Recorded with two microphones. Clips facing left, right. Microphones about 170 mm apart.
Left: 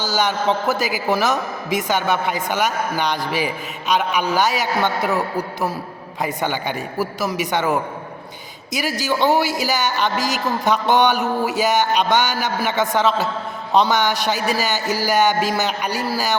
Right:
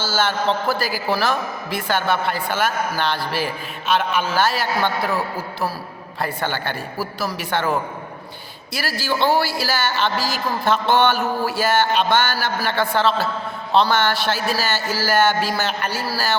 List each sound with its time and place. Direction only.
0.0 s a man's voice: 15° left (ahead or behind)
8.7 s a man's voice: 15° left (ahead or behind)